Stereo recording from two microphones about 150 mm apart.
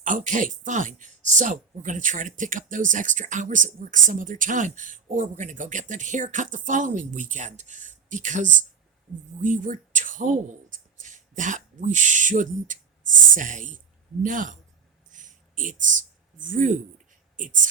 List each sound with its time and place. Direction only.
0.3 s speech: 60° right (ahead or behind)
15.1 s a sound: 60° right (ahead or behind)
17.3 s speech: 60° right (ahead or behind)